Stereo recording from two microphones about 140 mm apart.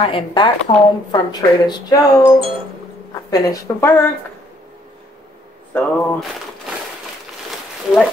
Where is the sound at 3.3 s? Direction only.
25° left (ahead or behind).